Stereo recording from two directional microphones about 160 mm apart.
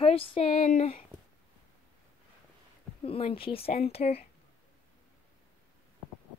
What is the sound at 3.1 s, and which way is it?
Speech, 35° left (ahead or behind).